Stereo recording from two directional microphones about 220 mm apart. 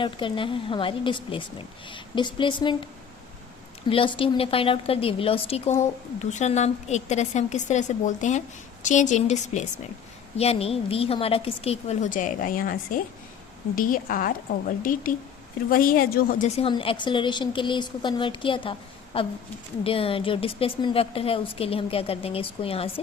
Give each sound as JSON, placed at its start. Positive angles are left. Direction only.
{"t": 0.0, "sound": "a woman's voice", "side_deg": 20}
{"t": 16.6, "sound": "a woman's voice", "side_deg": 25}